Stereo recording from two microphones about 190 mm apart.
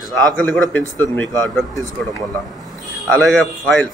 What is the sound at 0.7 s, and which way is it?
Speech, 10° left (ahead or behind).